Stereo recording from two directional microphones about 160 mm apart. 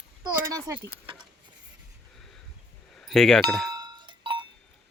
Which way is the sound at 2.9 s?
Centre (ahead or behind).